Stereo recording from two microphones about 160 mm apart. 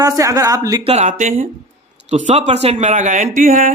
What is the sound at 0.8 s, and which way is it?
Speech, 45° right (ahead or behind).